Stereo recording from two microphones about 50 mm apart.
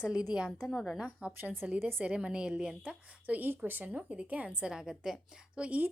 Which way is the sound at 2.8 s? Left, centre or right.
Right.